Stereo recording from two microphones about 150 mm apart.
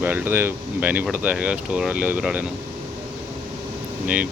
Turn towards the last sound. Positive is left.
turn(degrees=-10)  # may be behind; listen again after turning